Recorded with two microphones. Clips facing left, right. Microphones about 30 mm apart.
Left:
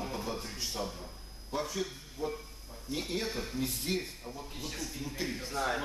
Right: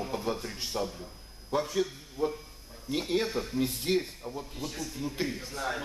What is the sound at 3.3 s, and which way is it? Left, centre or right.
Speech, centre.